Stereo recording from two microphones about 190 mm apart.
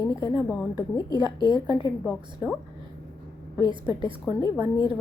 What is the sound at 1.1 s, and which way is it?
Speech, 25° right (ahead or behind).